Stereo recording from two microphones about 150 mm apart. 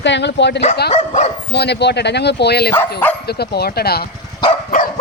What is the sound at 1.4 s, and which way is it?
Speech, 90° left.